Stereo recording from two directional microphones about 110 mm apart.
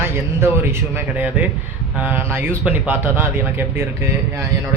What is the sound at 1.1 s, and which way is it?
Speech, 15° right (ahead or behind).